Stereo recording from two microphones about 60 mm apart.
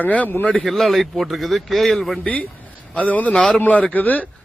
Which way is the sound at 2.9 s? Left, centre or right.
Left.